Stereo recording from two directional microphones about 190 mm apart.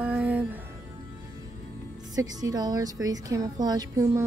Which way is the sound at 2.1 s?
20° right (ahead or behind).